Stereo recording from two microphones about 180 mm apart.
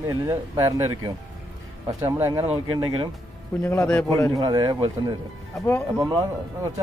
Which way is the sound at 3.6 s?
10° left (ahead or behind).